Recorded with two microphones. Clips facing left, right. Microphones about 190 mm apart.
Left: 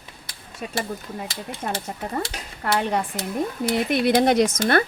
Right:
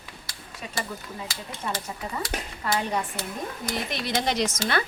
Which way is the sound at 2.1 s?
55° left (ahead or behind).